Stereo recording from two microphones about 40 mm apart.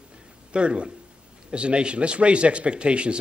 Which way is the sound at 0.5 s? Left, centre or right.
Right.